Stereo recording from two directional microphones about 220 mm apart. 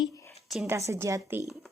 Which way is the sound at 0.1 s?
15° left (ahead or behind).